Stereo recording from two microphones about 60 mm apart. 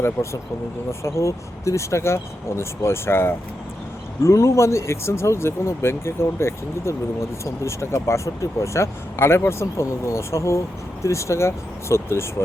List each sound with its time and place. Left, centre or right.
0.2 s speech: left
0.9 s speech: left